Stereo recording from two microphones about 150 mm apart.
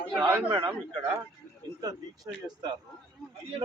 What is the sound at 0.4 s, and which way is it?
Speech, 40° right (ahead or behind).